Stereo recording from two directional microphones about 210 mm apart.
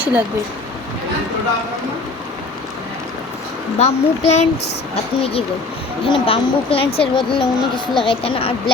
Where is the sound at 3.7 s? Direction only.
30° left (ahead or behind).